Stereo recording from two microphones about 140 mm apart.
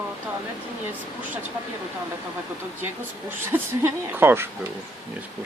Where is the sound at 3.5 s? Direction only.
15° right (ahead or behind).